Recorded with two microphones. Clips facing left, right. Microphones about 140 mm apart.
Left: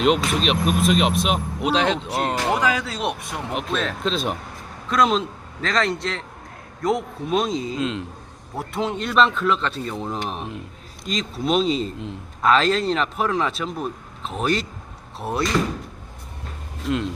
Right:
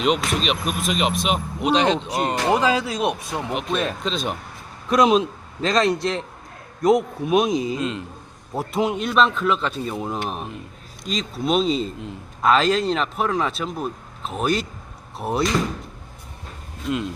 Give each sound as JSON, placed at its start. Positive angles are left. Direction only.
{"t": 0.0, "sound": "a man's voice", "side_deg": 0}
{"t": 2.5, "sound": "a man's voice", "side_deg": -25}
{"t": 3.5, "sound": "a man's voice", "side_deg": 0}
{"t": 4.9, "sound": "a man's voice", "side_deg": -15}
{"t": 7.8, "sound": "a man's voice", "side_deg": 0}
{"t": 8.5, "sound": "a man's voice", "side_deg": -15}
{"t": 16.8, "sound": "a man's voice", "side_deg": 0}